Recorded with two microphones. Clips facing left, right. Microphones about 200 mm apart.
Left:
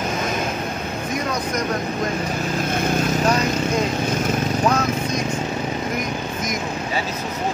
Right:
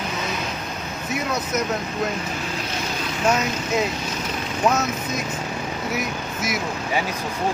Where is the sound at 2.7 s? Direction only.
50° left (ahead or behind).